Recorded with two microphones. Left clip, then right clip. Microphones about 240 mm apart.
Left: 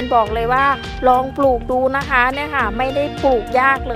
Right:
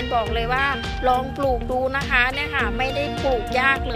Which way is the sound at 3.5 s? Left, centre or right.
Left.